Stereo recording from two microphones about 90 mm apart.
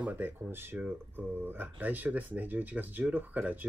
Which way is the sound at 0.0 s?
20° right (ahead or behind).